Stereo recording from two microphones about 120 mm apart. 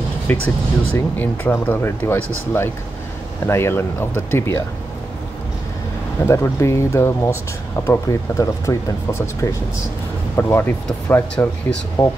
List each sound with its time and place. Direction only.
0.3 s speech: 10° left (ahead or behind)
6.2 s speech: 25° left (ahead or behind)
12.0 s speech: 30° left (ahead or behind)